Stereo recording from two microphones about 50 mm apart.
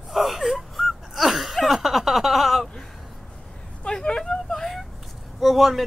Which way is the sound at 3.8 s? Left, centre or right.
Centre.